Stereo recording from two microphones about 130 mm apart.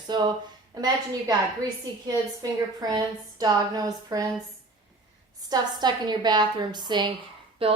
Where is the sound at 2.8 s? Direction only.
30° right (ahead or behind).